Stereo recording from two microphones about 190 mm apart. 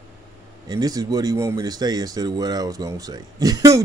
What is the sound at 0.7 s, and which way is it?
Speech, 20° right (ahead or behind).